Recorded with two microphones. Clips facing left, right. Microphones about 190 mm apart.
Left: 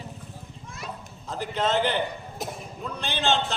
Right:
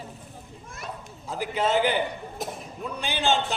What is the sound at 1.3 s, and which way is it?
A man's voice, 10° right (ahead or behind).